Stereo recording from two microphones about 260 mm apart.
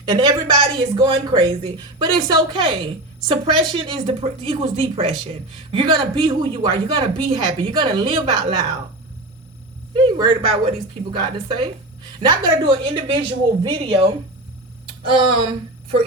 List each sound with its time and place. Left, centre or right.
0.1 s speech: centre
9.9 s a woman's voice: centre